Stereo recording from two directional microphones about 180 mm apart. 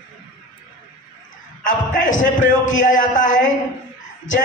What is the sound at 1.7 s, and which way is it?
A man's voice, 45° left (ahead or behind).